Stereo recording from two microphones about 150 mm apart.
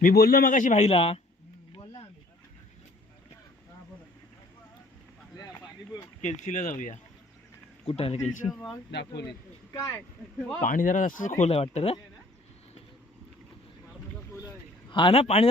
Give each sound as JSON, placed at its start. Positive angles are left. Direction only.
{"t": 0.0, "sound": "speech", "side_deg": 90}
{"t": 1.7, "sound": "a sound", "side_deg": 35}
{"t": 6.2, "sound": "speech", "side_deg": 55}
{"t": 7.9, "sound": "speech", "side_deg": 45}
{"t": 10.6, "sound": "speech", "side_deg": 60}
{"t": 14.8, "sound": "a man's voice", "side_deg": 35}